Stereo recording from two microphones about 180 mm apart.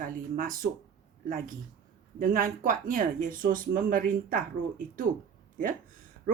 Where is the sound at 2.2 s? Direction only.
50° right (ahead or behind).